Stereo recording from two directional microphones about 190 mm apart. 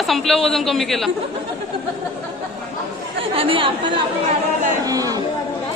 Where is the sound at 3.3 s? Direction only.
30° right (ahead or behind).